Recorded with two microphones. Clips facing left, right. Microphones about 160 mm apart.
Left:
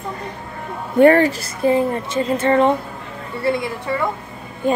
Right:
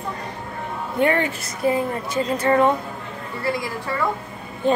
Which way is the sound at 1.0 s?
40° left (ahead or behind).